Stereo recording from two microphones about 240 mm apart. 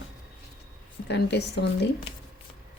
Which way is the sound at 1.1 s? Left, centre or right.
Left.